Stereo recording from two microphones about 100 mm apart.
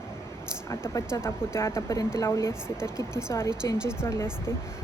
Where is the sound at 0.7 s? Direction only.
30° left (ahead or behind).